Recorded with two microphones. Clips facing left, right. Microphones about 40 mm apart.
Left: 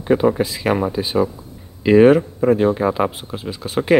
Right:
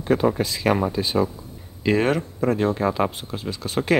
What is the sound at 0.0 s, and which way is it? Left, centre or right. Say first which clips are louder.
Speech: left 4 dB; centre.